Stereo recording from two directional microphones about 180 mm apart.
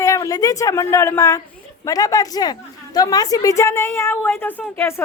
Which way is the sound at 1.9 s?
20° left (ahead or behind).